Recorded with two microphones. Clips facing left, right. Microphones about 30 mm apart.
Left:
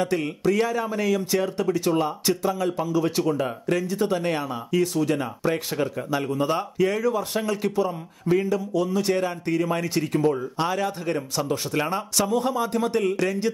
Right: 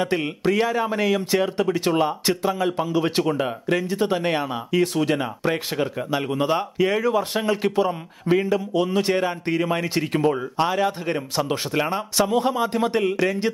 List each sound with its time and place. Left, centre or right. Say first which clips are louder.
0.0 s speech: right 1 dB; right
3.4 s speech: right 2 dB; right
4.9 s a man's voice: right 2 dB; right
5.2 s speech: right 1 dB; right
7.0 s speech: right 2 dB; right
7.7 s a man's voice: right 3 dB; right
8.4 s speech: right 3 dB; right
9.1 s speech: right 2 dB; right
10.6 s speech: right 5 dB; right
12.3 s speech: right 2 dB; right